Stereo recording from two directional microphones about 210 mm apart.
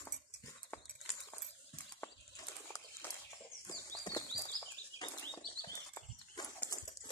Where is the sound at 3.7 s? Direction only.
20° left (ahead or behind).